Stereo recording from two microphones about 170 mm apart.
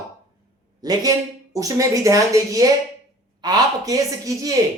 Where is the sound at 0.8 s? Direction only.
20° right (ahead or behind).